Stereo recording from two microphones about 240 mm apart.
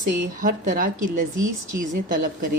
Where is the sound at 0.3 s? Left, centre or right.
Right.